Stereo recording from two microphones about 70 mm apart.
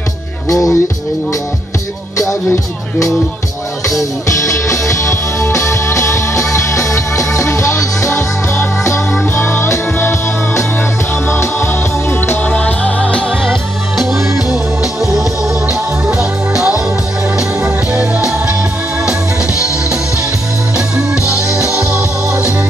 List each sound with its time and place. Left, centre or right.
0.5 s music: left
4.3 s music: left
12.4 s music: left
13.5 s music: centre